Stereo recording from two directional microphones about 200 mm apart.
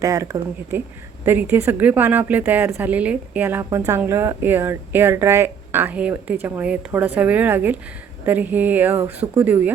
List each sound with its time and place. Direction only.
0.0 s a woman's voice: 15° right (ahead or behind)